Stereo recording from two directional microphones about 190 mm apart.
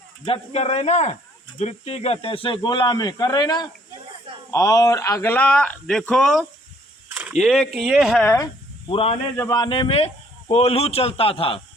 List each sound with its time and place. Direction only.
0.3 s a man's voice: 35° left (ahead or behind); by 8.3 s centre (ahead or behind)
8.9 s speech: 30° left (ahead or behind)
9.3 s a man's voice: 15° left (ahead or behind); by 11.6 s 30° left (ahead or behind)